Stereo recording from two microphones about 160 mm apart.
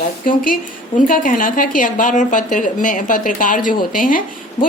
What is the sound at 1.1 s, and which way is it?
Speech, 55° left (ahead or behind).